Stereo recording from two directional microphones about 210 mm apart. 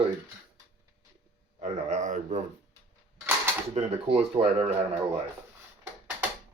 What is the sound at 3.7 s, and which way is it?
Speech, 30° right (ahead or behind).